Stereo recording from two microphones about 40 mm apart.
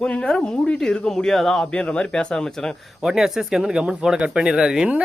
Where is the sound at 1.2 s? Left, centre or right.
Centre.